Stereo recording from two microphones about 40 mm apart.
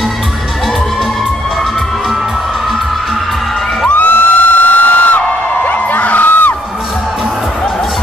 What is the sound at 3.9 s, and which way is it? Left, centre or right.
Music, left.